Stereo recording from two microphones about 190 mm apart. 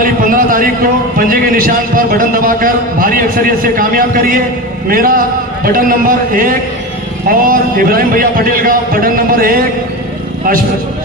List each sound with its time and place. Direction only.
0.0 s a man's voice: 45° right (ahead or behind)